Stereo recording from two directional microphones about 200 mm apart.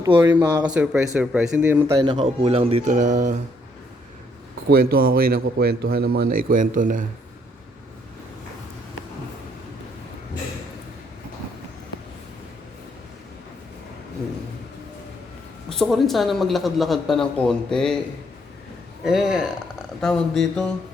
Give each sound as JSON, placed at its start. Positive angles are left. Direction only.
{"t": 0.2, "sound": "speech", "side_deg": -10}
{"t": 2.1, "sound": "speech", "side_deg": -30}
{"t": 4.7, "sound": "a man's voice", "side_deg": -45}
{"t": 15.7, "sound": "speech", "side_deg": 0}
{"t": 19.0, "sound": "speech", "side_deg": -5}